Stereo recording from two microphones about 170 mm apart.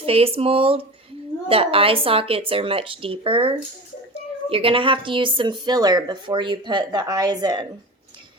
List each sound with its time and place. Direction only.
0.0 s speech: 35° right (ahead or behind)